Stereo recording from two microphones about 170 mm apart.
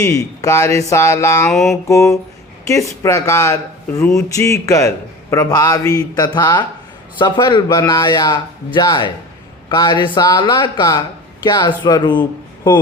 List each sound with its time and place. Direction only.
0.0 s speech: 20° left (ahead or behind)
1.5 s mantra: centre (ahead or behind)
1.9 s a man's voice: 15° left (ahead or behind)